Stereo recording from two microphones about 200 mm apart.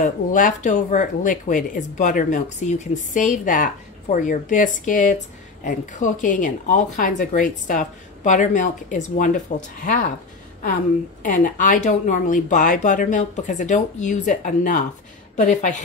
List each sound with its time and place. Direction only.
0.0 s speech: 40° left (ahead or behind)
11.2 s speech: 40° left (ahead or behind)